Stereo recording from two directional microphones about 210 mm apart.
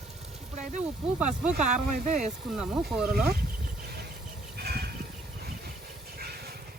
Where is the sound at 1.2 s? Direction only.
5° right (ahead or behind).